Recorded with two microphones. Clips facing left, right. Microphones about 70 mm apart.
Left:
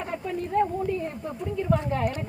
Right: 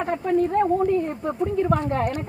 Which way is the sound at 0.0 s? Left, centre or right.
Right.